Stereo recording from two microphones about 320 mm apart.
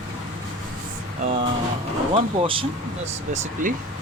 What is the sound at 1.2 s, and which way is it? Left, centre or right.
Speech, right.